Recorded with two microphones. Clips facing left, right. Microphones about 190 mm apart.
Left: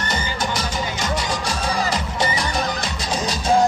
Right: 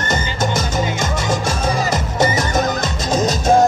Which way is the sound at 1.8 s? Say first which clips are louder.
Right 5 dB; 45° right (ahead or behind).